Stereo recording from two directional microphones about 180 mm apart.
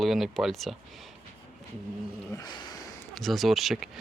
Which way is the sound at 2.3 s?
25° left (ahead or behind).